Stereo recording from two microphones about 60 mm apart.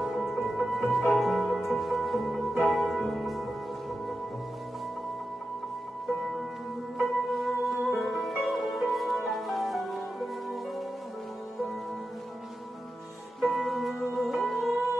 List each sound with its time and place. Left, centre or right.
0.0 s music: centre
7.0 s music: centre
13.4 s music: centre